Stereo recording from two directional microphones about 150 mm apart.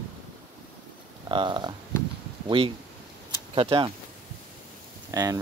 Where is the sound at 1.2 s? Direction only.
30° right (ahead or behind).